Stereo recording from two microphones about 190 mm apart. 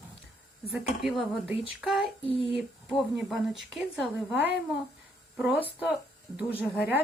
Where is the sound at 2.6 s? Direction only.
Centre (ahead or behind).